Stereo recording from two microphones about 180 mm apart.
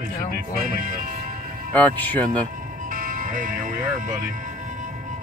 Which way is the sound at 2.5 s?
50° right (ahead or behind).